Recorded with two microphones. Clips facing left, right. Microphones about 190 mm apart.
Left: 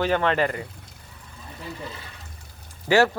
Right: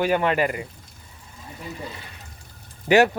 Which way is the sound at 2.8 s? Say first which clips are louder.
Right 2 dB; 20° right (ahead or behind).